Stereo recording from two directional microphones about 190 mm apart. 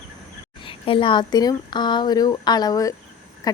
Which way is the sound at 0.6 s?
30° left (ahead or behind).